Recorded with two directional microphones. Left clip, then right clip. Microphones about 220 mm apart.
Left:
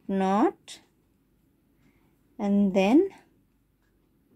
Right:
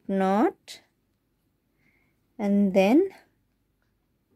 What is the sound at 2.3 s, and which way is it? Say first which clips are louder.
Speech: right 2 dB; 30° right (ahead or behind).